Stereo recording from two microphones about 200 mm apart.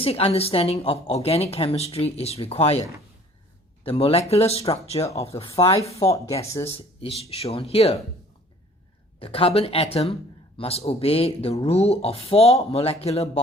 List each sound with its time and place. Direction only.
0.0 s a woman's voice: 30° left (ahead or behind)
3.8 s a woman's voice: 30° left (ahead or behind)
5.5 s speech: 15° left (ahead or behind)
5.7 s a woman's voice: 30° left (ahead or behind)
6.1 s speech: 15° left (ahead or behind)
6.7 s speech: 30° left (ahead or behind)
9.1 s a woman's voice: 30° left (ahead or behind)